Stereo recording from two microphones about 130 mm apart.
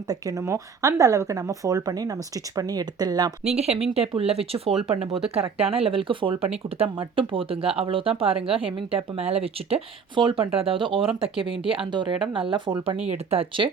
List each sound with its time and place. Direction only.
0.1 s speech: 25° right (ahead or behind)
3.4 s speech: 55° right (ahead or behind)